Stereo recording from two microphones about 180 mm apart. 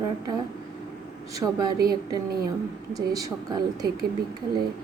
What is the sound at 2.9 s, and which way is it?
Speech, 20° right (ahead or behind).